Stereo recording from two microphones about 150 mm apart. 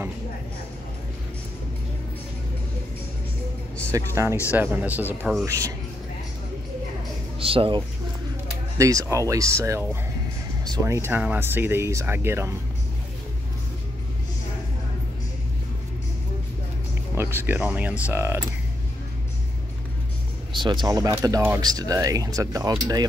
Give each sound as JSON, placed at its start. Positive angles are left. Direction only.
{"t": 3.9, "sound": "speech", "side_deg": -20}
{"t": 7.3, "sound": "a sound", "side_deg": -35}
{"t": 8.7, "sound": "speech", "side_deg": -20}
{"t": 17.1, "sound": "speech", "side_deg": -15}
{"t": 20.5, "sound": "speech", "side_deg": -30}
{"t": 21.5, "sound": "speech", "side_deg": -25}